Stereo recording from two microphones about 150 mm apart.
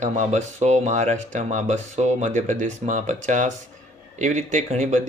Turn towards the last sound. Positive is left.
turn(degrees=-55)  # may be behind; listen again after turning